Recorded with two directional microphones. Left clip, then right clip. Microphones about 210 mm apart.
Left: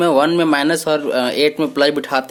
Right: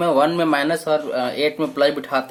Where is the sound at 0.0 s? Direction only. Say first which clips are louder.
Left 3 dB; 40° left (ahead or behind).